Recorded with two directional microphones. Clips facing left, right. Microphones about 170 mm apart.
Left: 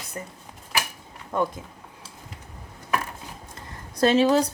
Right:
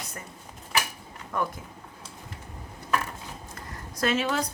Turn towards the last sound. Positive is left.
turn(degrees=35)  # may be behind; listen again after turning